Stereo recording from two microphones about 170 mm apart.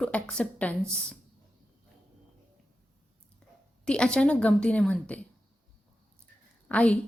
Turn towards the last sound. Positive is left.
turn(degrees=10)  # may be behind; listen again after turning